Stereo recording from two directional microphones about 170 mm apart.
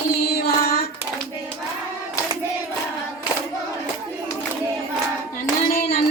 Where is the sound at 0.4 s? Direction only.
65° left (ahead or behind).